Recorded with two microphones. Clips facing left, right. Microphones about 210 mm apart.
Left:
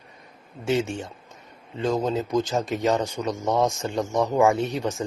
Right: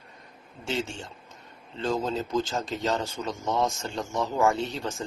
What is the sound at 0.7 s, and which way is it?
Speech, 20° left (ahead or behind).